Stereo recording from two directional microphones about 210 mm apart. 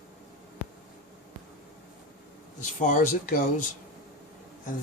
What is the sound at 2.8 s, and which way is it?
Speech, 35° left (ahead or behind).